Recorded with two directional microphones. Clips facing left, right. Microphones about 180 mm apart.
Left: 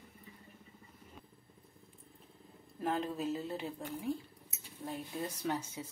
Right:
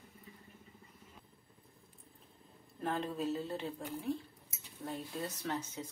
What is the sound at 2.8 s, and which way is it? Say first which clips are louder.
Speech: left 1 dB; centre (ahead or behind).